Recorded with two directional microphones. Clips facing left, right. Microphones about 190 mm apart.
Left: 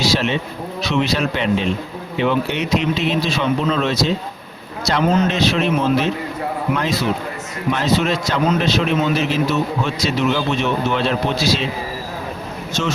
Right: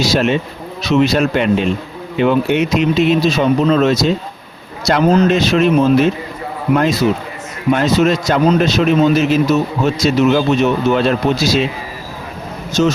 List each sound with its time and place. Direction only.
0.0 s a man's voice: 50° right (ahead or behind)
12.8 s speech: 40° right (ahead or behind)